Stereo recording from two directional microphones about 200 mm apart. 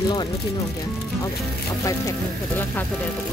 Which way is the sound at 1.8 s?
15° left (ahead or behind).